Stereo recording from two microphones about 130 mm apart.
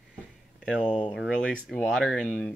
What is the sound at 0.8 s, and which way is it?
Speech, 10° left (ahead or behind).